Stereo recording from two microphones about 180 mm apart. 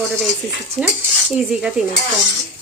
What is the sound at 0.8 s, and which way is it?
Dishes, 5° left (ahead or behind).